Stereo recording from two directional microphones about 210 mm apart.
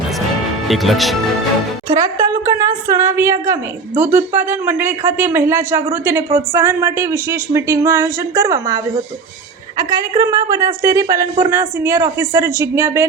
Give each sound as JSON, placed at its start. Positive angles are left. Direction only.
{"t": 0.7, "sound": "speech", "side_deg": 0}
{"t": 1.9, "sound": "a woman's voice", "side_deg": -15}